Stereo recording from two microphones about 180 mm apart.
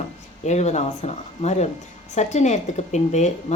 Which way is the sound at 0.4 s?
40° left (ahead or behind).